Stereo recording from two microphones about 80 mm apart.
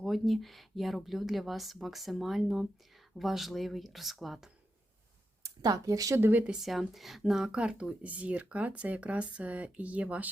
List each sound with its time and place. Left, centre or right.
0.0 s speech: centre
5.6 s speech: right
6.1 s speech: right
6.5 s speech: centre